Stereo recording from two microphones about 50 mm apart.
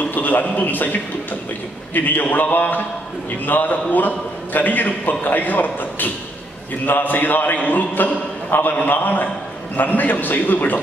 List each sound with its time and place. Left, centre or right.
0.0 s a man's voice: left
2.0 s a man's voice: left